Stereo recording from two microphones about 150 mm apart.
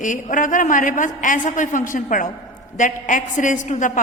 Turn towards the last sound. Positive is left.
turn(degrees=55)  # may be behind; listen again after turning